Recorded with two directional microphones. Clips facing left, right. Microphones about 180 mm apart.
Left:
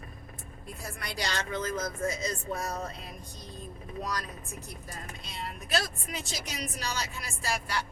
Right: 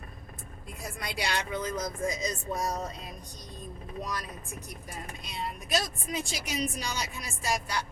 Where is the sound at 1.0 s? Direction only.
15° right (ahead or behind).